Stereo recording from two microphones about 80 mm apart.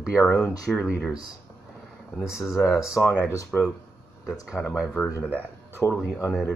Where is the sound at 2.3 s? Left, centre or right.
Left.